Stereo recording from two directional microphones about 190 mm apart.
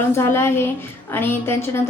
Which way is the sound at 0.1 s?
15° left (ahead or behind).